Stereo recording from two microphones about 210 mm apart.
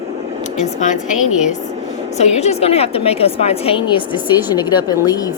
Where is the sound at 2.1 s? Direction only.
30° left (ahead or behind).